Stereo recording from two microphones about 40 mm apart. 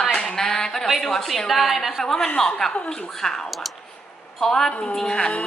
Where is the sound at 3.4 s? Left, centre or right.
Centre.